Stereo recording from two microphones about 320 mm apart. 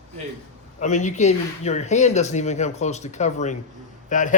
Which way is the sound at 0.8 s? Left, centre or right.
Left.